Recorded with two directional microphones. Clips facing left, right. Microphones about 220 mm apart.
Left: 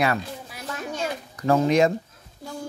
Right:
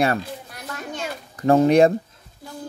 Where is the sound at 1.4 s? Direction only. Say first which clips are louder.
Right 4 dB; 35° right (ahead or behind).